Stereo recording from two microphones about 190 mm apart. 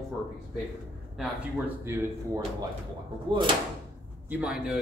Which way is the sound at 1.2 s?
Centre (ahead or behind).